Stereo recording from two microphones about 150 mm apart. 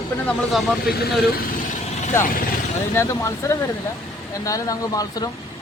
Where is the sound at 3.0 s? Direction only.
20° left (ahead or behind).